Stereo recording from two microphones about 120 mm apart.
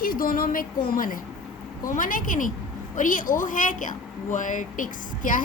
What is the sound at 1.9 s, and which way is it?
A woman's voice, 90° left.